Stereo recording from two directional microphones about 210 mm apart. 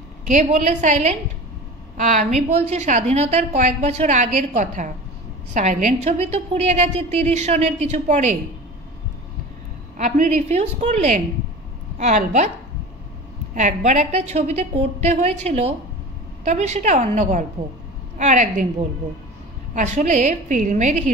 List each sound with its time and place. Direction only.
0.3 s a woman's voice: 35° right (ahead or behind)
2.7 s a woman's voice: 30° right (ahead or behind)
9.9 s a woman's voice: 35° right (ahead or behind)
13.6 s a woman's voice: 35° right (ahead or behind)